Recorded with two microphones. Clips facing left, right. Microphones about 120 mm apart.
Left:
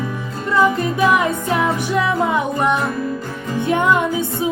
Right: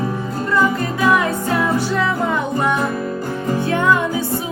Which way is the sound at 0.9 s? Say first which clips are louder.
Even; 20° left (ahead or behind).